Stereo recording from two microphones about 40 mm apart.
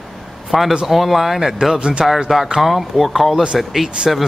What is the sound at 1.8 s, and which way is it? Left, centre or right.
Speech, right.